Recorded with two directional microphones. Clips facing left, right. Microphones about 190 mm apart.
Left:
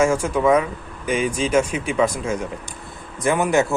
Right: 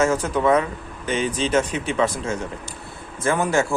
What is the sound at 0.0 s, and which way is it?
Speech, 10° left (ahead or behind).